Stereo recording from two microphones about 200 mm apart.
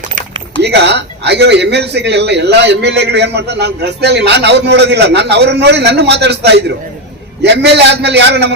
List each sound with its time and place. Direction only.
0.6 s speech: 55° right (ahead or behind)